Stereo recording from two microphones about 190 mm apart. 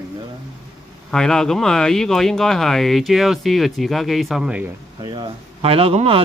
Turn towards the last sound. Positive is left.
turn(degrees=-30)  # may be behind; listen again after turning